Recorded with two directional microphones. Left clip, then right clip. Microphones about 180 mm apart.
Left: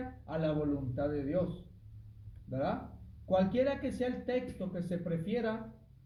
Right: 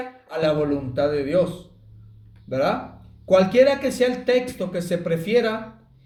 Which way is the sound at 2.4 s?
30° right (ahead or behind).